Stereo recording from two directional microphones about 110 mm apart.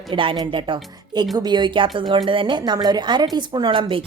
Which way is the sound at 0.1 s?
50° right (ahead or behind).